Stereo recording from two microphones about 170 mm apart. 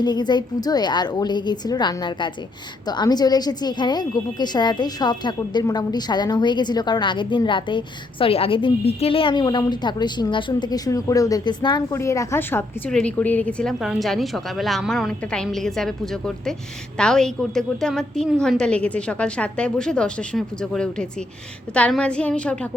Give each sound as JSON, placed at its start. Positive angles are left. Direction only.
{"t": 0.0, "sound": "a woman's voice", "side_deg": 25}